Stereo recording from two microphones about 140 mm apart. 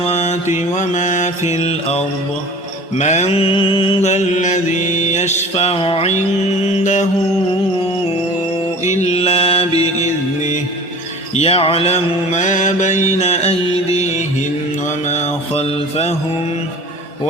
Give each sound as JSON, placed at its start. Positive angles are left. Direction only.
{"t": 0.0, "sound": "mantra", "side_deg": 50}
{"t": 0.5, "sound": "mantra", "side_deg": 60}
{"t": 4.1, "sound": "mantra", "side_deg": 55}
{"t": 8.9, "sound": "mantra", "side_deg": 55}
{"t": 11.3, "sound": "mantra", "side_deg": 45}
{"t": 15.1, "sound": "mantra", "side_deg": 50}